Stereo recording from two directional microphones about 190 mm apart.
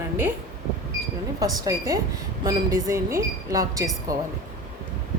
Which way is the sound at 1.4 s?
20° right (ahead or behind).